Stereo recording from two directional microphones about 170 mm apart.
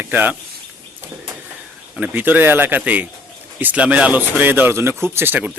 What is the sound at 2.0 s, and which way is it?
Speech, 10° right (ahead or behind).